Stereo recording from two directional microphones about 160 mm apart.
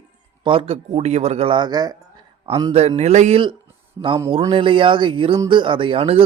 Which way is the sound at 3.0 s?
45° right (ahead or behind).